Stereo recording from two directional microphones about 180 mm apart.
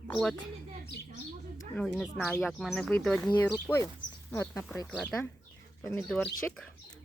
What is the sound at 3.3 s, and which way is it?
Speech, 20° left (ahead or behind).